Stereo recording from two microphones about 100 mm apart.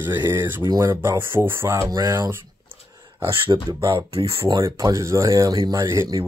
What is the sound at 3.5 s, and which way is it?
Speech, 40° right (ahead or behind).